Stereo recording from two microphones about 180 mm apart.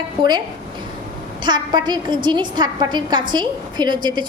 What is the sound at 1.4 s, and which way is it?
A woman's voice, 25° right (ahead or behind).